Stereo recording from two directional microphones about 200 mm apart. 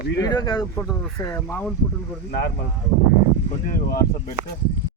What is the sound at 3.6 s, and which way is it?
Speech, 45° left (ahead or behind).